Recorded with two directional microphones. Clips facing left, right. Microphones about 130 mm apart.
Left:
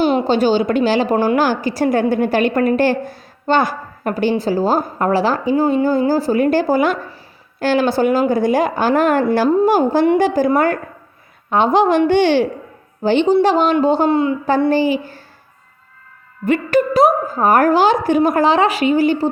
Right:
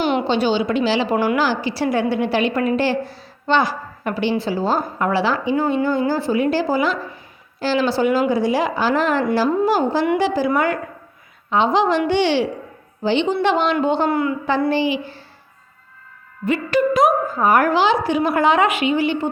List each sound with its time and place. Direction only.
0.0 s a woman's voice: 35° left (ahead or behind)
1.1 s a woman's voice: 35° left (ahead or behind)
1.4 s a woman's voice: 45° left (ahead or behind)
14.1 s a woman's voice: 25° left (ahead or behind)
14.7 s a woman's voice: 45° left (ahead or behind)
16.9 s a woman's voice: 35° left (ahead or behind)